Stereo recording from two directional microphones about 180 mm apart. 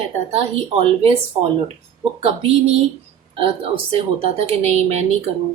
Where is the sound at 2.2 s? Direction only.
35° right (ahead or behind).